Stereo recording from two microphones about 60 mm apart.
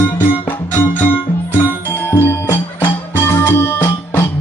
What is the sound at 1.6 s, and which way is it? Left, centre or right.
Music, left.